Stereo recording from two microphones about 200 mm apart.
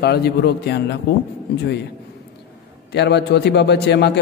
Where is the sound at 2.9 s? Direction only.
55° left (ahead or behind).